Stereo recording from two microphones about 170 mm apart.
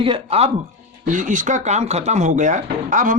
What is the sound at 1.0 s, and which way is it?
Speech, 50° right (ahead or behind).